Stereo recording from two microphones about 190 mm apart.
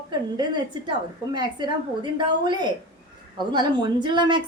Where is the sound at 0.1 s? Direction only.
25° right (ahead or behind).